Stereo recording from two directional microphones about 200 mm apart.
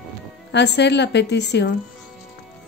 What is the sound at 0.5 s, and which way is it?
A woman's voice, 60° left (ahead or behind).